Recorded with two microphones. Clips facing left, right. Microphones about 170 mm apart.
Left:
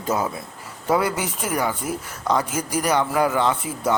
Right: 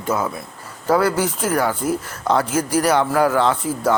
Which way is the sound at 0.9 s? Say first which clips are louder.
Right 4 dB; centre (ahead or behind).